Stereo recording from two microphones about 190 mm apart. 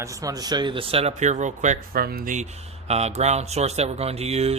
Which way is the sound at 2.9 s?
35° right (ahead or behind).